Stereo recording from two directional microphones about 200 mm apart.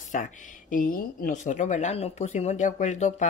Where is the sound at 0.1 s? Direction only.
40° left (ahead or behind).